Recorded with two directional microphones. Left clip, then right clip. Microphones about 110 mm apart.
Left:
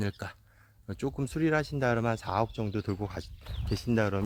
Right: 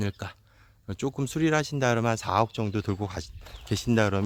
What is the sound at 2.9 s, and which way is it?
Speech, 20° right (ahead or behind).